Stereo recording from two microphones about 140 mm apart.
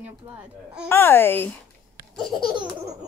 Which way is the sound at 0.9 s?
15° left (ahead or behind).